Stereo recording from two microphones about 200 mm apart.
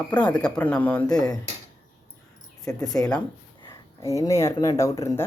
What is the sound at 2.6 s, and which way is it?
Speech, 20° left (ahead or behind).